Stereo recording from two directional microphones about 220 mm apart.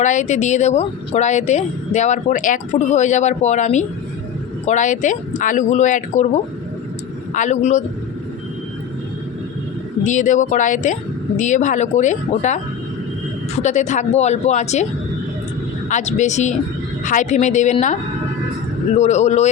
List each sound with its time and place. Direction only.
0.0 s speech: 35° left (ahead or behind)
10.0 s speech: 35° left (ahead or behind)
13.6 s speech: 35° left (ahead or behind)
15.9 s speech: 35° left (ahead or behind)
18.9 s speech: 30° left (ahead or behind)